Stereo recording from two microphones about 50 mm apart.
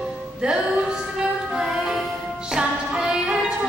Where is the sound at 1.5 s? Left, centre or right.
Centre.